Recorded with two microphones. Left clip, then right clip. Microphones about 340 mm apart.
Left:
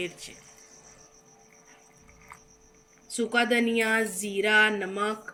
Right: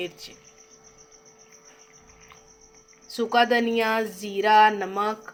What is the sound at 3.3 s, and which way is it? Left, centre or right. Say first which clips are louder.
A woman's voice: right 4 dB; centre.